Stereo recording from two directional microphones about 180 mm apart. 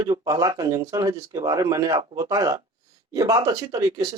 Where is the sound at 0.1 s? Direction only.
20° right (ahead or behind).